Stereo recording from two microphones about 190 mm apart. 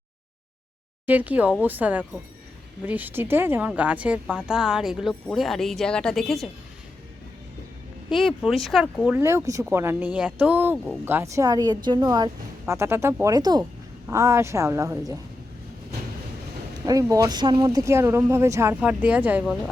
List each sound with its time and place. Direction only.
1.0 s speech: 10° right (ahead or behind)
8.4 s a woman's voice: centre (ahead or behind); by 15.2 s 15° right (ahead or behind)
16.8 s speech: 20° right (ahead or behind)